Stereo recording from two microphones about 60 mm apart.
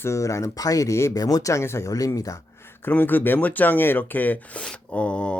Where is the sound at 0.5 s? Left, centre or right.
Left.